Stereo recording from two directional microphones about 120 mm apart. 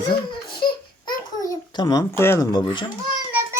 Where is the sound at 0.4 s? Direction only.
45° left (ahead or behind).